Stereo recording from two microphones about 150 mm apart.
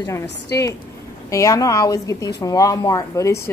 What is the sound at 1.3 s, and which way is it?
Speech, 20° left (ahead or behind).